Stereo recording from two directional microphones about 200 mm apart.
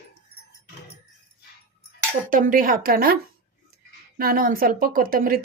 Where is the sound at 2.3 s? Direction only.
45° right (ahead or behind).